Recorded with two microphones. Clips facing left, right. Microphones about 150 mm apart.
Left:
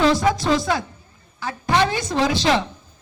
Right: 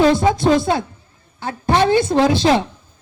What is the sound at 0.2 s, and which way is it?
Music, 25° right (ahead or behind).